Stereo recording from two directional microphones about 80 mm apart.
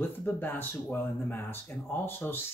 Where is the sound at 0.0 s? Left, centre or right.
Left.